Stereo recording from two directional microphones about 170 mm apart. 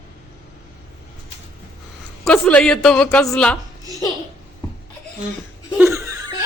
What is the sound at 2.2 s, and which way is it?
A man's voice, 5° left (ahead or behind).